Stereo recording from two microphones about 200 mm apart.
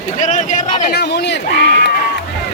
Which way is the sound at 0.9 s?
55° left (ahead or behind).